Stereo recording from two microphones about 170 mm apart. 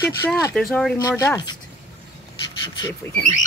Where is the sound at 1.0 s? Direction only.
20° left (ahead or behind).